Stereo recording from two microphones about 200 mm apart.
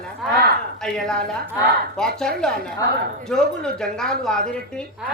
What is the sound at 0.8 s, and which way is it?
Speech, 5° left (ahead or behind).